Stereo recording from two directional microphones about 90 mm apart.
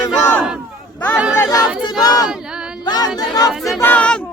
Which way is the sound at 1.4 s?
40° left (ahead or behind).